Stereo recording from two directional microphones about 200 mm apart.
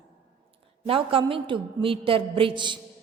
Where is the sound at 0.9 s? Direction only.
25° right (ahead or behind).